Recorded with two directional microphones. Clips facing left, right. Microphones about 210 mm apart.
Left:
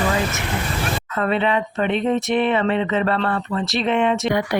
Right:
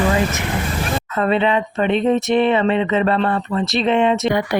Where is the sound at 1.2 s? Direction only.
25° right (ahead or behind).